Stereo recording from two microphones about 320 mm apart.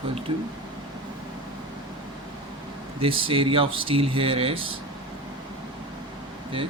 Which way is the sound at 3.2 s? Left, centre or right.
Centre.